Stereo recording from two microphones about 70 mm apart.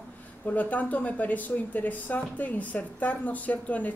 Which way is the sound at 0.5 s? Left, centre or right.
Left.